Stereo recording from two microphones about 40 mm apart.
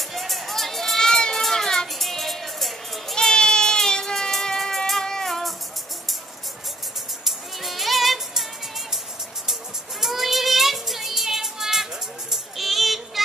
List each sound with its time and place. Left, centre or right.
0.1 s children playing: centre
2.0 s music: centre
3.2 s a sound: centre
4.3 s music: centre
7.2 s music: centre
9.5 s child singing: centre